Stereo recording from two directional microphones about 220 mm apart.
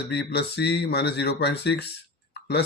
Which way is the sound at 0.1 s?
50° left (ahead or behind).